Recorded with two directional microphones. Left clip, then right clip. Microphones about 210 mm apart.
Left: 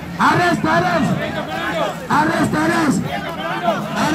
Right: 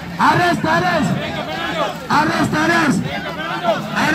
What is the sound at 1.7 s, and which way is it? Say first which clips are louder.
Crowd: right 1 dB; 50° right (ahead or behind).